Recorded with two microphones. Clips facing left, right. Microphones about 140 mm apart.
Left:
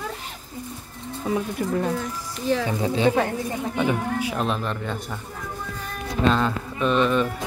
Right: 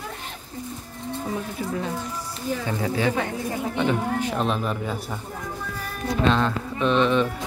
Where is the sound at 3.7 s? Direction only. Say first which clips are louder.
Even; 10° left (ahead or behind).